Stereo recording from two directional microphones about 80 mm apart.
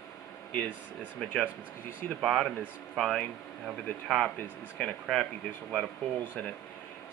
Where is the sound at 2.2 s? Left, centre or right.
Centre.